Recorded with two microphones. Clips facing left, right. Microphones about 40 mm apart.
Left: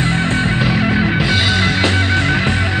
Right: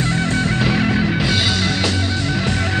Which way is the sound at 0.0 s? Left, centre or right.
Left.